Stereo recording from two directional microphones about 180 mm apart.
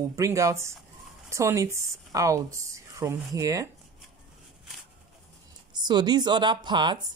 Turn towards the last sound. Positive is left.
turn(degrees=-25)  # may be behind; listen again after turning